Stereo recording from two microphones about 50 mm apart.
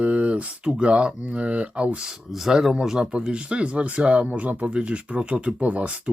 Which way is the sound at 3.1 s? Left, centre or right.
Centre.